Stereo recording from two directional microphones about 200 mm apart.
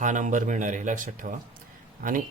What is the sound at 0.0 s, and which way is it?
Speech, 40° right (ahead or behind).